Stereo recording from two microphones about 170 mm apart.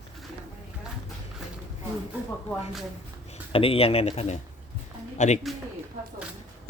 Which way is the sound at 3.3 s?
35° left (ahead or behind).